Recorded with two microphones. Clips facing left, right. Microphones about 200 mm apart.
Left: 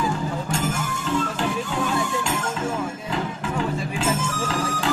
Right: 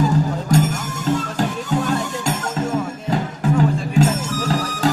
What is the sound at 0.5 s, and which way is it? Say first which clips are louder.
Music: right 7 dB; 40° right (ahead or behind).